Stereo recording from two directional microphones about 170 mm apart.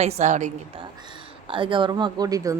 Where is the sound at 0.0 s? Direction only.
40° right (ahead or behind).